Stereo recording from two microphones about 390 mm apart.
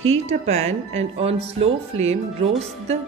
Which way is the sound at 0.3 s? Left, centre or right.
Centre.